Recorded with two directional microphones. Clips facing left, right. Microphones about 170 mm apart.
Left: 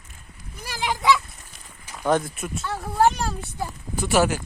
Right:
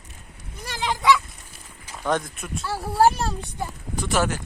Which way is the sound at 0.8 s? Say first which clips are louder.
Right 1 dB; 15° left (ahead or behind).